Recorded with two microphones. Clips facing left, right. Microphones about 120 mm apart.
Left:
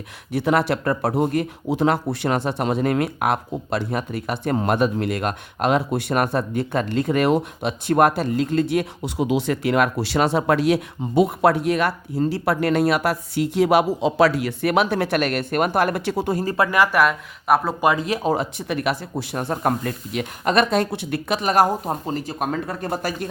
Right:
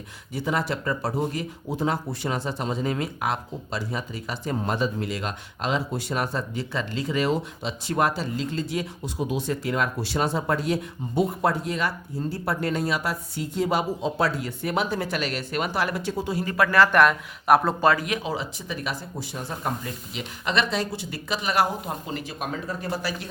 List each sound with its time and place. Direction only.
0.3 s speech: 65° left (ahead or behind)
16.3 s speech: 40° left (ahead or behind)
16.7 s speech: 10° left (ahead or behind)
17.7 s speech: 15° left (ahead or behind)
18.2 s speech: 50° left (ahead or behind)